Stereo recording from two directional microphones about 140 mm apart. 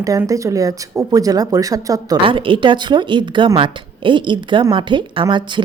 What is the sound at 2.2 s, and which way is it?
Speech, 40° right (ahead or behind).